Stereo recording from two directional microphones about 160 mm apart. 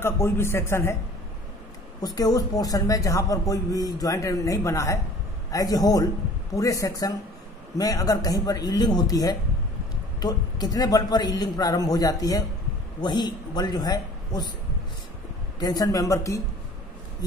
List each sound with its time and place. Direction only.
0.0 s speech: 15° left (ahead or behind)
2.0 s a man's voice: 25° left (ahead or behind)
15.6 s a man's voice: 20° left (ahead or behind)